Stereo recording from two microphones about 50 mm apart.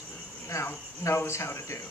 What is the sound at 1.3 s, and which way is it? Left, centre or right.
Speech, left.